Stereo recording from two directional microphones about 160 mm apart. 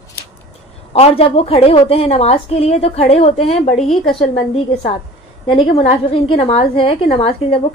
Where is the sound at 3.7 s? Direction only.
Centre (ahead or behind).